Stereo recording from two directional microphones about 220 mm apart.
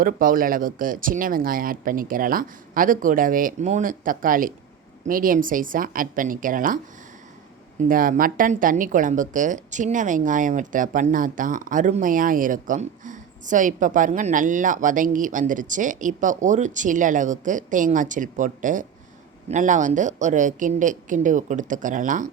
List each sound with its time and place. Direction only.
0.0 s speech: 40° right (ahead or behind)
7.8 s speech: 40° right (ahead or behind)